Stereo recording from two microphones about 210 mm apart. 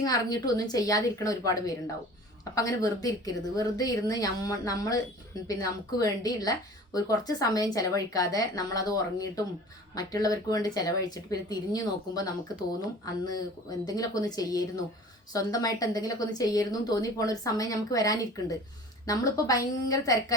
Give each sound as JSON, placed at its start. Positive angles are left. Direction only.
{"t": 0.0, "sound": "a woman's voice", "side_deg": 15}